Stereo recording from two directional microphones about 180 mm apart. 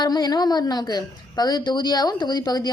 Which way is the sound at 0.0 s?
20° left (ahead or behind).